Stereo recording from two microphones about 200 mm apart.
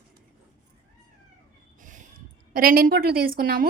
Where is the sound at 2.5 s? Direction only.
45° right (ahead or behind).